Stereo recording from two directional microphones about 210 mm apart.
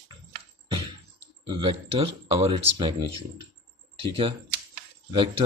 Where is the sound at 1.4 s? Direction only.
25° right (ahead or behind).